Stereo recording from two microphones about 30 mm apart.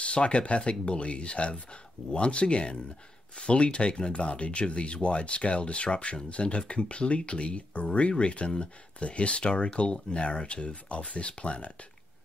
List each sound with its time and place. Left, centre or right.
0.0 s speech: left